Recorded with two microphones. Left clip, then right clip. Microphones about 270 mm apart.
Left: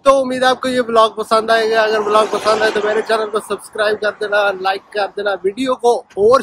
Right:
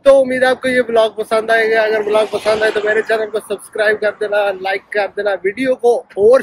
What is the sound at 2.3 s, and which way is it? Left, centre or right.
Speech, left.